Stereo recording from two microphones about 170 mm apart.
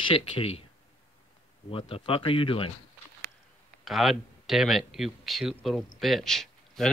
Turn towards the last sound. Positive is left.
turn(degrees=0)  # may be behind; listen again after turning